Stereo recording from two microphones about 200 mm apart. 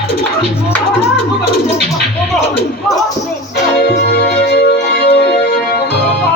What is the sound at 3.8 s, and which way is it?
Music, 55° left (ahead or behind).